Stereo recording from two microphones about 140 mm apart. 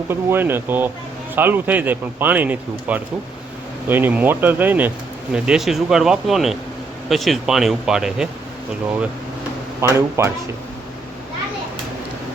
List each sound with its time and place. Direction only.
0.1 s speech: 15° right (ahead or behind)
9.8 s speech: 20° right (ahead or behind)